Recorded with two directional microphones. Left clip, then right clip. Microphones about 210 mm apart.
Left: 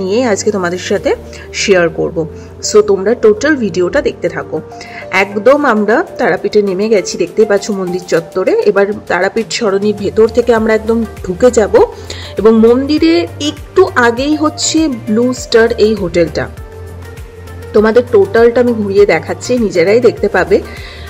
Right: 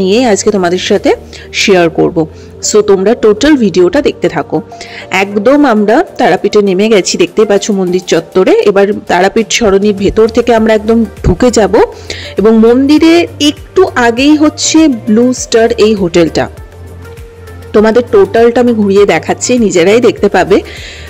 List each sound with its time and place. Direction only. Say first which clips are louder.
0.1 s speech: right 2 dB; 30° right (ahead or behind)
12.4 s a woman's voice: right 2 dB; 20° right (ahead or behind)
17.7 s speech: right 2 dB; 30° right (ahead or behind)